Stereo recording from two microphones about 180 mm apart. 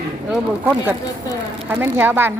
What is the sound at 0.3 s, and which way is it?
Speech, 5° right (ahead or behind).